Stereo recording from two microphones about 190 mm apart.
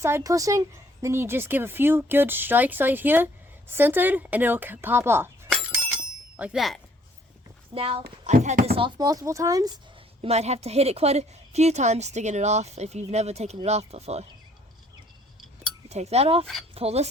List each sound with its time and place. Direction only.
0.0 s speech: 15° right (ahead or behind)
5.6 s bicycle bell: 5° right (ahead or behind)
7.7 s a woman's voice: 30° right (ahead or behind)
9.0 s speech: 20° right (ahead or behind)
10.2 s a woman's voice: 35° right (ahead or behind)
15.9 s a woman's voice: 35° right (ahead or behind)